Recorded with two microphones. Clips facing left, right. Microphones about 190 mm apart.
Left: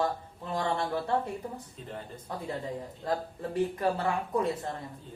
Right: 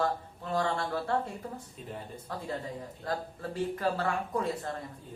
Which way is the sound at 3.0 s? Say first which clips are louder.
Left 3 dB; 20° left (ahead or behind).